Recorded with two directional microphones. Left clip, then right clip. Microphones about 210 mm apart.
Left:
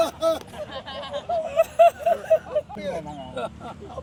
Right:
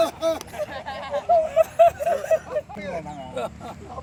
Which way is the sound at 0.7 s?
55° left (ahead or behind).